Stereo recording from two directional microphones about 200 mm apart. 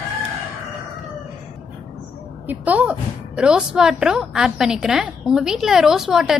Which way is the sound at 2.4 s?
5° right (ahead or behind).